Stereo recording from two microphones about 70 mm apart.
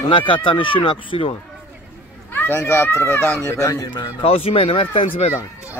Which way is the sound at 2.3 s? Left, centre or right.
Left.